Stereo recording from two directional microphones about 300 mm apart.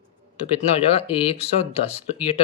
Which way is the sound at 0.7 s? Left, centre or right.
Centre.